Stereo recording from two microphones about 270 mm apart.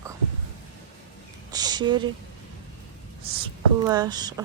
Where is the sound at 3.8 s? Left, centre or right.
Centre.